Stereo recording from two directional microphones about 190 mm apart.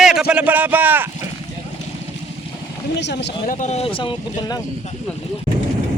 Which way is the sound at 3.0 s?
65° left (ahead or behind).